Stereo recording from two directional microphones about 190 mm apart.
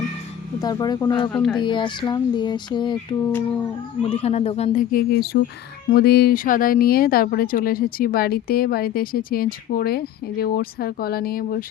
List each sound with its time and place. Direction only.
0.6 s speech: 20° left (ahead or behind)
1.3 s speech: 5° left (ahead or behind)
1.5 s speech: 25° left (ahead or behind)
4.1 s speech: 35° left (ahead or behind); by 11.6 s 50° left (ahead or behind)